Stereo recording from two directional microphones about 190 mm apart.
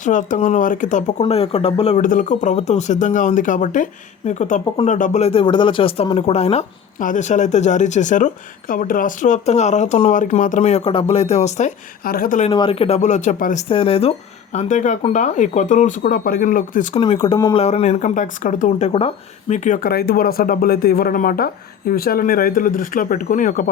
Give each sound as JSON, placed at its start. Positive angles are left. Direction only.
{"t": 0.0, "sound": "speech", "side_deg": 40}
{"t": 2.0, "sound": "speech", "side_deg": 45}
{"t": 12.0, "sound": "speech", "side_deg": 50}
{"t": 12.5, "sound": "speech", "side_deg": 30}
{"t": 13.7, "sound": "speech", "side_deg": 30}
{"t": 16.9, "sound": "speech", "side_deg": 25}
{"t": 17.6, "sound": "speech", "side_deg": 35}
{"t": 18.9, "sound": "speech", "side_deg": 30}